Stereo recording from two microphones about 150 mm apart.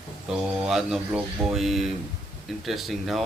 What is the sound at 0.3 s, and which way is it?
Speech, 5° right (ahead or behind).